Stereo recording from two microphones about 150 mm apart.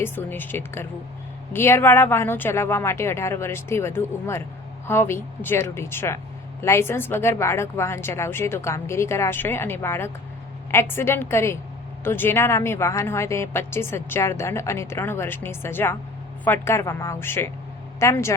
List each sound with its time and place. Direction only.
0.0 s a woman's voice: 15° left (ahead or behind)